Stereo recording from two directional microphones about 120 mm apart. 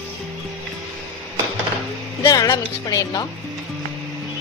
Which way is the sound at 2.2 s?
30° left (ahead or behind).